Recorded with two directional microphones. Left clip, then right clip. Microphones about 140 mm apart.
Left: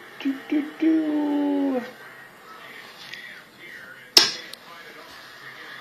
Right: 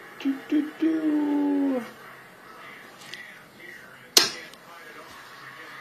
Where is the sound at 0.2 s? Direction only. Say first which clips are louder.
Even; 30° left (ahead or behind).